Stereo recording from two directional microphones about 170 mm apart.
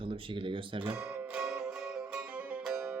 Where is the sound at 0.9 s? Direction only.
10° right (ahead or behind).